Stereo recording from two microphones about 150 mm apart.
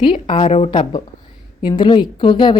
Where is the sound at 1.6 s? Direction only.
30° left (ahead or behind).